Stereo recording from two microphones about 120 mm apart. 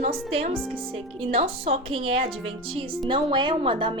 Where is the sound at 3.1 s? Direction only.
40° right (ahead or behind).